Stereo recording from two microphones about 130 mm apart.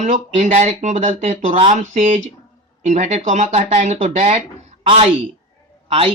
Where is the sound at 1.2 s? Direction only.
60° right (ahead or behind).